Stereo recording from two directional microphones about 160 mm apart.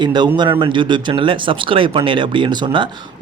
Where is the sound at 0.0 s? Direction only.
30° right (ahead or behind).